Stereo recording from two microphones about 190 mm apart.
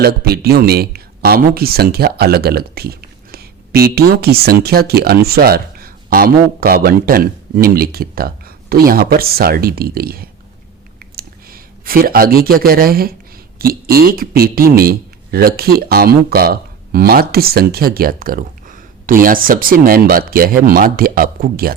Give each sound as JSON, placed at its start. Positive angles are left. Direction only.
{"t": 0.0, "sound": "speech", "side_deg": -55}
{"t": 11.0, "sound": "a sound", "side_deg": -50}
{"t": 13.6, "sound": "speech", "side_deg": -50}